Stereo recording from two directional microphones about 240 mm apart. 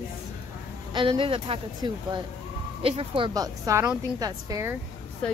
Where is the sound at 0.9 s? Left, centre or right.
Centre.